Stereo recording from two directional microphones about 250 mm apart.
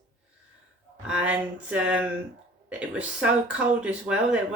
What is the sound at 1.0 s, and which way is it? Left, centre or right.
Speech, centre.